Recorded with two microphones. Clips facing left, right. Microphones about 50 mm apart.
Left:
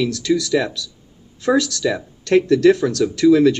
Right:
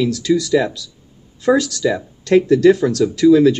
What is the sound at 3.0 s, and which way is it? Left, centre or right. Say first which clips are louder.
Speech: right 2 dB; left.